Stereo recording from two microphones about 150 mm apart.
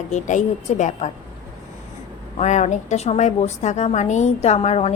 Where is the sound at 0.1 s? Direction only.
55° left (ahead or behind).